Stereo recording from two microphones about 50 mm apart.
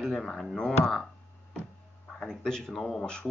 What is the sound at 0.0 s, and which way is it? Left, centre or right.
Speech, centre.